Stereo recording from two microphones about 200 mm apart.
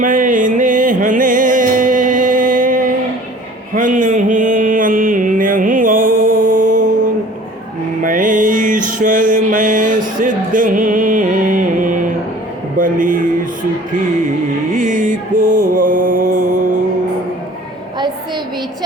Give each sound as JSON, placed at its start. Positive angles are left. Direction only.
{"t": 0.0, "sound": "music", "side_deg": -40}
{"t": 3.8, "sound": "mantra", "side_deg": -40}
{"t": 8.0, "sound": "music", "side_deg": -40}
{"t": 12.8, "sound": "a sound", "side_deg": -40}
{"t": 14.7, "sound": "music", "side_deg": -40}